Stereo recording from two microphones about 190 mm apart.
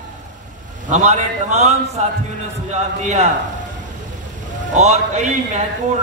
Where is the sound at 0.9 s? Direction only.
35° right (ahead or behind).